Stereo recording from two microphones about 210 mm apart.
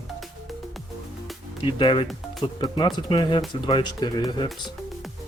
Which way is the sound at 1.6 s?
25° left (ahead or behind).